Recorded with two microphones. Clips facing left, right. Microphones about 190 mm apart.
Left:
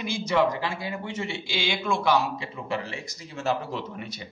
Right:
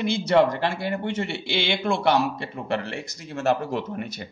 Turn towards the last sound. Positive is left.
turn(degrees=-50)  # may be behind; listen again after turning